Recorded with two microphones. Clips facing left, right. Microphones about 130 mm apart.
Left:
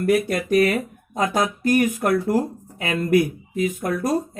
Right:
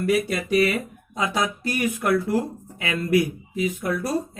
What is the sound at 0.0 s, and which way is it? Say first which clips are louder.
Speech: left 3 dB; 50° left (ahead or behind).